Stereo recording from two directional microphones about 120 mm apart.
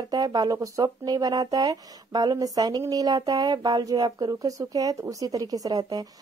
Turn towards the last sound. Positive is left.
turn(degrees=-30)  # may be behind; listen again after turning